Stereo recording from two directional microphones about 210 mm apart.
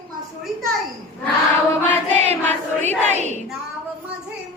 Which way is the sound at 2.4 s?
10° left (ahead or behind).